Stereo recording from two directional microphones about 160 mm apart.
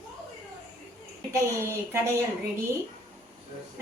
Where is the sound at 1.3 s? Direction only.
15° right (ahead or behind).